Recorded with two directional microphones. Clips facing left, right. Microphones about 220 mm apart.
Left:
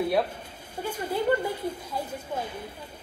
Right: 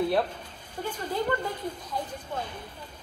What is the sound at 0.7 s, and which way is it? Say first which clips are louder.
Speech: left 1 dB; 10° left (ahead or behind).